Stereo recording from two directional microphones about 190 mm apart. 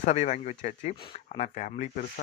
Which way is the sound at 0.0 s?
40° left (ahead or behind).